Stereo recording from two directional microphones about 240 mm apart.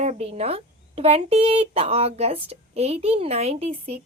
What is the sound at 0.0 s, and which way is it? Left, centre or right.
Speech, right.